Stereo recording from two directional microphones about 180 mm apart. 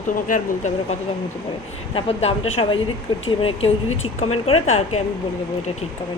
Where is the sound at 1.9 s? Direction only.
35° left (ahead or behind).